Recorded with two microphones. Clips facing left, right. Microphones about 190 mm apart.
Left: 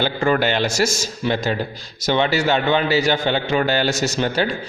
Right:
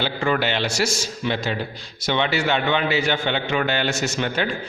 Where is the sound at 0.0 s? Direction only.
45° left (ahead or behind).